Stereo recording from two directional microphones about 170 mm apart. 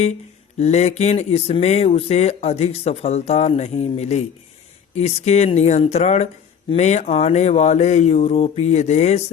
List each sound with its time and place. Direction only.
0.6 s speech: 40° left (ahead or behind)